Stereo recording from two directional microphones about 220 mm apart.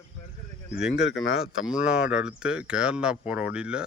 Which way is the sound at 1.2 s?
65° left (ahead or behind).